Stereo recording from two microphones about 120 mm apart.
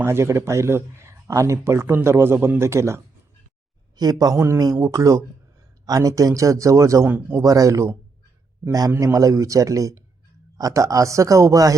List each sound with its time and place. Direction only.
0.0 s a man's voice: 20° right (ahead or behind)
7.4 s speech: 30° right (ahead or behind)